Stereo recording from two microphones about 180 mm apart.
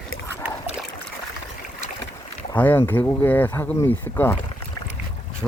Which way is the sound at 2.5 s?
10° left (ahead or behind).